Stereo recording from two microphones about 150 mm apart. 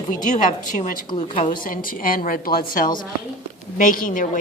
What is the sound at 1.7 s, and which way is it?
A woman's voice, 70° left (ahead or behind).